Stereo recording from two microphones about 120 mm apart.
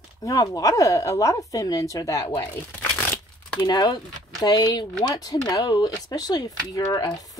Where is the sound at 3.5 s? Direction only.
35° left (ahead or behind).